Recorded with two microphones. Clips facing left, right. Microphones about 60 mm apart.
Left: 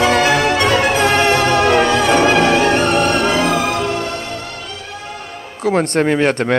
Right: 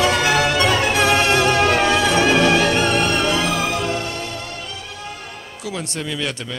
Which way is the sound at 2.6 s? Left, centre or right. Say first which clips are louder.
Left 4 dB; left.